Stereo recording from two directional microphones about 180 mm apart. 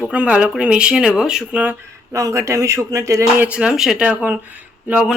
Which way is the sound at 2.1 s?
15° right (ahead or behind).